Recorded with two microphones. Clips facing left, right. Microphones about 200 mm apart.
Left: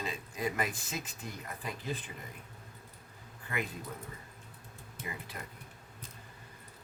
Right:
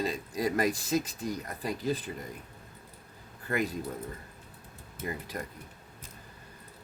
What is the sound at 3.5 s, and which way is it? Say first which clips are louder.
Speech: right 7 dB; 40° right (ahead or behind).